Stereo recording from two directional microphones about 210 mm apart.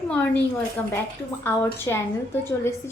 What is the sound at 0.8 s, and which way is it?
A woman's voice, 5° left (ahead or behind).